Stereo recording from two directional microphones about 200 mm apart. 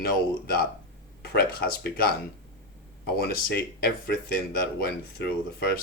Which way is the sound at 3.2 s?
50° left (ahead or behind).